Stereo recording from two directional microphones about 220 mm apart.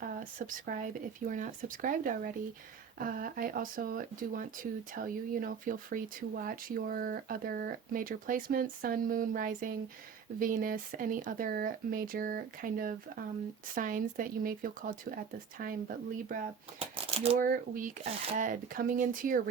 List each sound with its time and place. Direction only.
0.0 s speech: 40° right (ahead or behind)
16.8 s a sound: 25° right (ahead or behind)
17.4 s speech: 40° right (ahead or behind)